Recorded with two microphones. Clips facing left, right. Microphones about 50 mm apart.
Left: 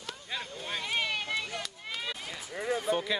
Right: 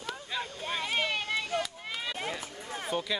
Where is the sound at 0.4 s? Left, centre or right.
Centre.